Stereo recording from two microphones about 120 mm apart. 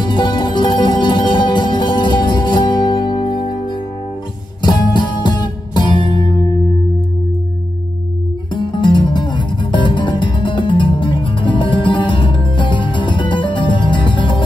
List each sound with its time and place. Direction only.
0.0 s music: 40° left (ahead or behind)
8.5 s music: 40° left (ahead or behind)